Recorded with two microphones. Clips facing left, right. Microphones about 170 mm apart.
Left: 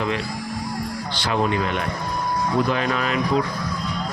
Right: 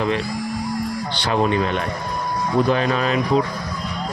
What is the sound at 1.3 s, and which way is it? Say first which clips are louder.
Speech: right 3 dB; 30° right (ahead or behind).